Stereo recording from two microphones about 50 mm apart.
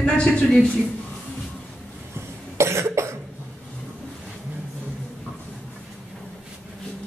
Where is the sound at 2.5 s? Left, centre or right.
Right.